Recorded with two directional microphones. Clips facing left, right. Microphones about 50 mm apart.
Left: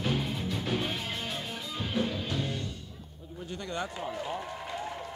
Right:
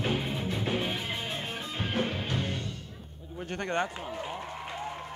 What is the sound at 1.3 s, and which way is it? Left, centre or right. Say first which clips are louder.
Music: right 1 dB; right.